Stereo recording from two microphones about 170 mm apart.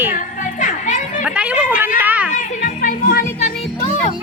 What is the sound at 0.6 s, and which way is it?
Children playing, 50° left (ahead or behind).